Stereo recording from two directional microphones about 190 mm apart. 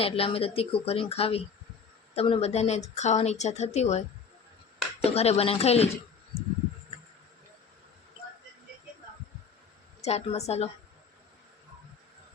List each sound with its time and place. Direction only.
0.0 s speech: 30° left (ahead or behind)
5.0 s speech: 35° left (ahead or behind)
10.0 s speech: 35° left (ahead or behind)